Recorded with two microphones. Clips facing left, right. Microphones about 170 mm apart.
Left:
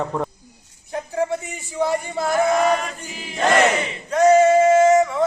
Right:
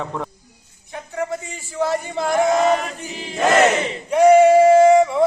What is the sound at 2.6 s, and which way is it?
Chant, 35° right (ahead or behind).